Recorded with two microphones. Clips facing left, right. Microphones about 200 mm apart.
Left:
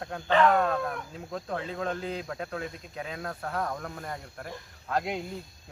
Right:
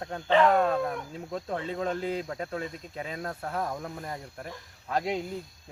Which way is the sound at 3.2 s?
20° right (ahead or behind).